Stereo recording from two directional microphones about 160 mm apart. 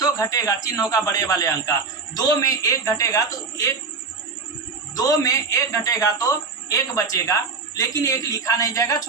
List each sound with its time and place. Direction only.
0.0 s a man's voice: 20° left (ahead or behind)
4.9 s a man's voice: 20° left (ahead or behind)